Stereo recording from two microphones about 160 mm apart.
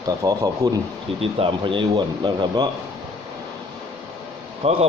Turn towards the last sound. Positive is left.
turn(degrees=-40)  # may be behind; listen again after turning